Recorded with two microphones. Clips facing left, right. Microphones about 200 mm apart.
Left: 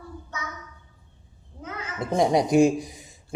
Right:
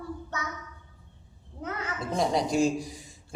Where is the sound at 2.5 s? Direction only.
60° left (ahead or behind).